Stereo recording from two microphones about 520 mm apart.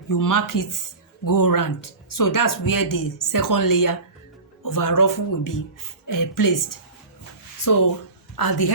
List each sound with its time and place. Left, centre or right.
0.1 s a woman's voice: left